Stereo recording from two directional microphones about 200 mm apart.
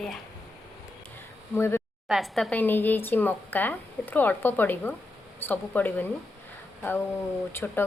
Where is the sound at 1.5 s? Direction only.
10° left (ahead or behind).